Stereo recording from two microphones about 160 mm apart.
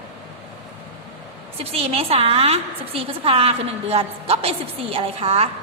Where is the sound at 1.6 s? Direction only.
40° right (ahead or behind).